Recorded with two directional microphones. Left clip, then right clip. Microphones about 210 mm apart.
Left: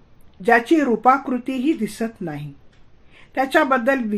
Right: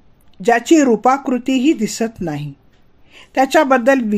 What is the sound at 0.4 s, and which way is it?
A woman's voice, 35° right (ahead or behind).